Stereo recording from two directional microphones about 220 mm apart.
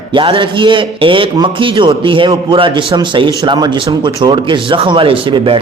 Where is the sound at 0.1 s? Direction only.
20° right (ahead or behind).